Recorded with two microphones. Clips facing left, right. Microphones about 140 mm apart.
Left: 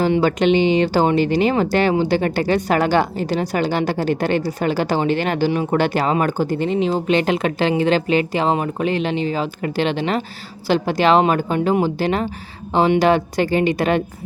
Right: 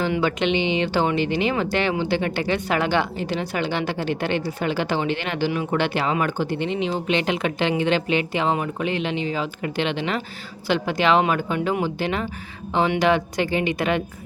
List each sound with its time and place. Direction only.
0.0 s speech: 40° left (ahead or behind)